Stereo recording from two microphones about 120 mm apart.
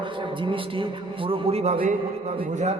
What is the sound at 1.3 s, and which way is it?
Speech, 60° right (ahead or behind).